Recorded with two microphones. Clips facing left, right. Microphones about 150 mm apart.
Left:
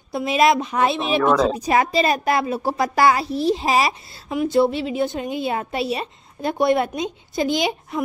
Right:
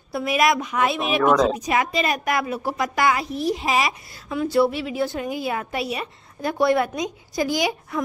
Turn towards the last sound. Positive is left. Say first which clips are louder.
# left 2 dB
turn(degrees=25)  # may be behind; listen again after turning